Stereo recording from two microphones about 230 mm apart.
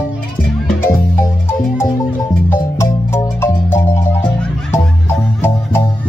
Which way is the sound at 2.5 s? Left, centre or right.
Centre.